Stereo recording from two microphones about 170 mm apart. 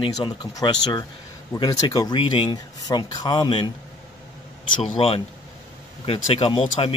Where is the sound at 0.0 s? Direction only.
25° left (ahead or behind).